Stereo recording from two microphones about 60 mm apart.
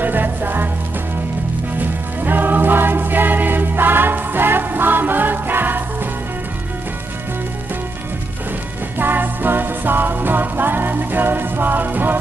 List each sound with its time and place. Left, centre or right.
0.0 s music: right
1.8 s music: right
8.9 s music: right